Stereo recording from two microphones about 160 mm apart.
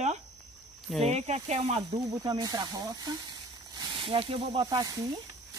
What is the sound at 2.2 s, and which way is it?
Speech, 25° right (ahead or behind).